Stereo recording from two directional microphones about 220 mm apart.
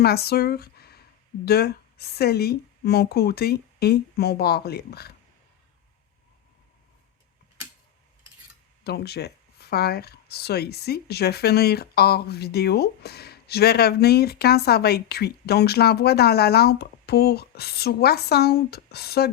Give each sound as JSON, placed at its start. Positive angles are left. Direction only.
{"t": 0.0, "sound": "speech", "side_deg": 45}
{"t": 8.8, "sound": "speech", "side_deg": 50}